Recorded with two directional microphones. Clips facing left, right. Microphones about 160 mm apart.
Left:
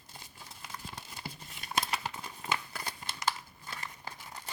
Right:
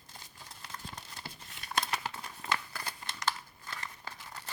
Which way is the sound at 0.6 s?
5° left (ahead or behind).